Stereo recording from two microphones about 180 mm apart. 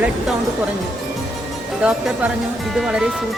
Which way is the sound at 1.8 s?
5° right (ahead or behind).